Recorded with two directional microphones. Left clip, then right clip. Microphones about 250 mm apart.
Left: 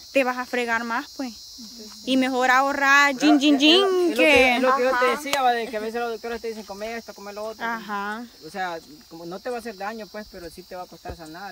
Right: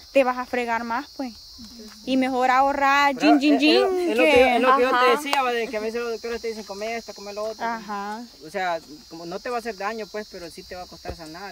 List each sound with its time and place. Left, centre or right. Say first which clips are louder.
0.1 s speech: right 2 dB; centre
2.0 s speech: left 1 dB; centre
4.6 s speech: right 2 dB; right
5.4 s speech: left 2 dB; centre
8.5 s cricket: right 4 dB; centre